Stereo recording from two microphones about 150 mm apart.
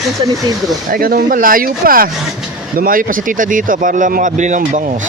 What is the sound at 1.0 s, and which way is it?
Speech, 70° right (ahead or behind).